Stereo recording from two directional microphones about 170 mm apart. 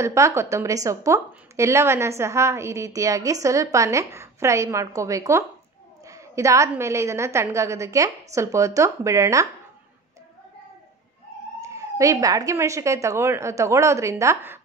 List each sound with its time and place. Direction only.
0.0 s a woman's voice: 15° right (ahead or behind)
11.6 s a woman's voice: 20° right (ahead or behind)